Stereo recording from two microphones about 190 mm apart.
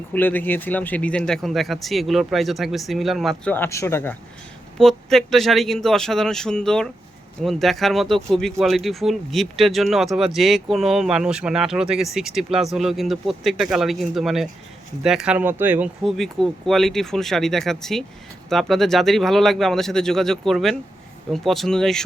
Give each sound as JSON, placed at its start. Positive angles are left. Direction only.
{"t": 0.1, "sound": "speech", "side_deg": 10}